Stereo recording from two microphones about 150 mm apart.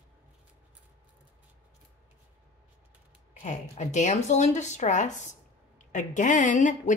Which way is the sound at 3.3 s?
55° left (ahead or behind).